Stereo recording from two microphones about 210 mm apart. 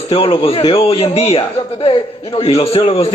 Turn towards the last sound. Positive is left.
turn(degrees=30)  # may be behind; listen again after turning